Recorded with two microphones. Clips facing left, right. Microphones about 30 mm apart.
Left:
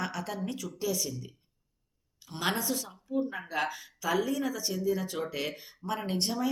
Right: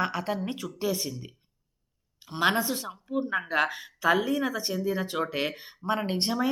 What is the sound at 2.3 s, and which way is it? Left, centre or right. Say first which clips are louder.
Speech: right 6 dB; right.